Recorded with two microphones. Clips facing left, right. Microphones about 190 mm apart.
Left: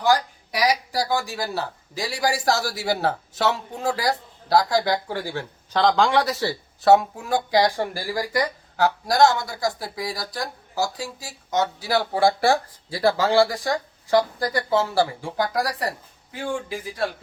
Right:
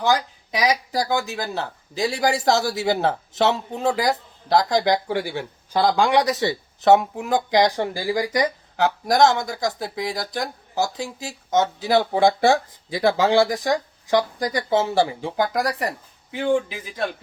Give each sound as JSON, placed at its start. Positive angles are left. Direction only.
{"t": 0.0, "sound": "speech", "side_deg": -20}